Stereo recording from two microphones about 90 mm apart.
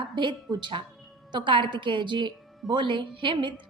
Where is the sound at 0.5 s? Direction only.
65° right (ahead or behind).